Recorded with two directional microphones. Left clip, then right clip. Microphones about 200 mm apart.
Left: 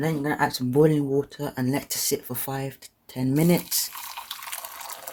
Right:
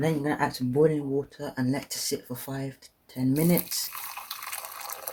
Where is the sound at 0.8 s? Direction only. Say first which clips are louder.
Left 3 dB; 40° left (ahead or behind).